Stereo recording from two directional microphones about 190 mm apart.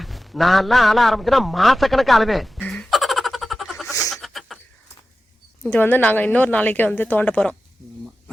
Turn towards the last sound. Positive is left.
turn(degrees=5)  # may be behind; listen again after turning